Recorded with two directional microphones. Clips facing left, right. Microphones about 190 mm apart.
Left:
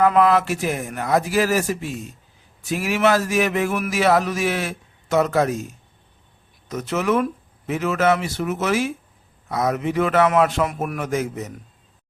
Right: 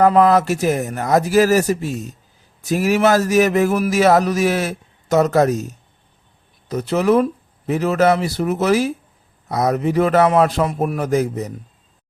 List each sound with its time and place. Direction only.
0.0 s speech: 40° right (ahead or behind)